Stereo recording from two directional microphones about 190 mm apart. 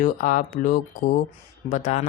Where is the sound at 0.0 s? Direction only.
45° left (ahead or behind).